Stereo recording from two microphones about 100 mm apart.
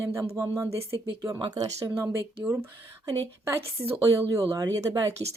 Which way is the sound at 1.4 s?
45° right (ahead or behind).